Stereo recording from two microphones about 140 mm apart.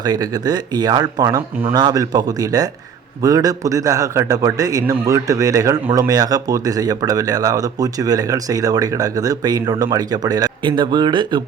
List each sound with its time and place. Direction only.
0.0 s a man's voice: 30° right (ahead or behind)